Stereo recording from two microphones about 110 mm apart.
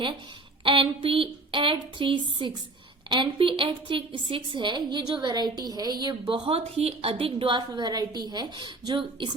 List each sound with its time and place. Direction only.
0.6 s a woman's voice: 50° right (ahead or behind)
6.5 s a woman's voice: 65° right (ahead or behind)
7.7 s a woman's voice: 40° right (ahead or behind)